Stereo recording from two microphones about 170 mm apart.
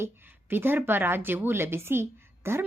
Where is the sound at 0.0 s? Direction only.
10° right (ahead or behind).